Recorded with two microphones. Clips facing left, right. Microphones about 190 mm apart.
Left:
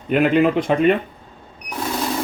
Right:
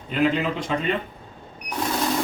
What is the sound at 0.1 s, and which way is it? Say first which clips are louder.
Speech: left 7 dB; 60° left (ahead or behind).